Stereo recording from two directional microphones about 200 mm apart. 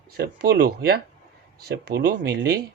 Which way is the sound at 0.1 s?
50° right (ahead or behind).